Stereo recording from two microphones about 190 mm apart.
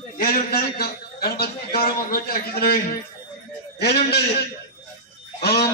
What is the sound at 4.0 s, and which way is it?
Speech, 55° left (ahead or behind).